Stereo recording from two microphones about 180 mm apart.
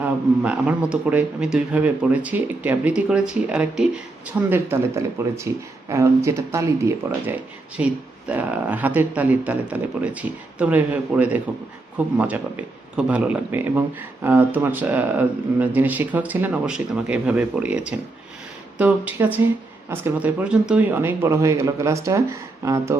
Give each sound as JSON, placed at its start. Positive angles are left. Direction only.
{"t": 0.0, "sound": "speech", "side_deg": -10}